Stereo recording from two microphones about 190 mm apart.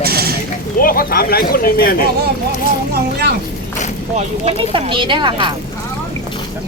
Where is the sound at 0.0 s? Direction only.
55° right (ahead or behind).